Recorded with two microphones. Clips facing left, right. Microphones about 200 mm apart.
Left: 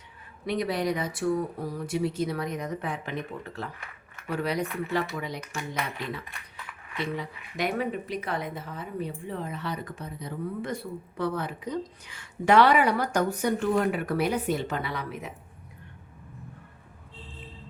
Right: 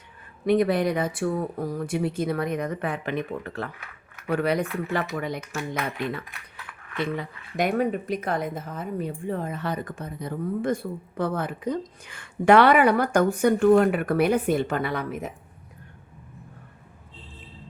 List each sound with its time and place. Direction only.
0.4 s speech: 55° right (ahead or behind)
7.5 s speech: 45° right (ahead or behind)